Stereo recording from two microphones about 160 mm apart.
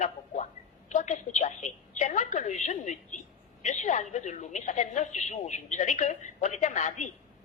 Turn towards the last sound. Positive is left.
turn(degrees=50)  # may be behind; listen again after turning